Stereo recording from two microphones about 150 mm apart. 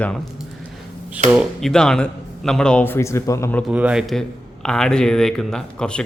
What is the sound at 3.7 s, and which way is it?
A man's voice, 5° right (ahead or behind).